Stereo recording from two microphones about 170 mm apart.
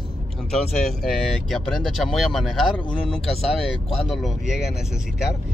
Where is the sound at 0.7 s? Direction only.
Centre (ahead or behind).